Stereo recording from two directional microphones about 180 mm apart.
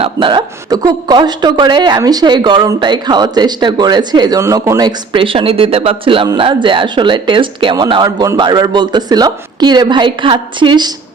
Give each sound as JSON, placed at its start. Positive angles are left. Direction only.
{"t": 0.0, "sound": "speech", "side_deg": -25}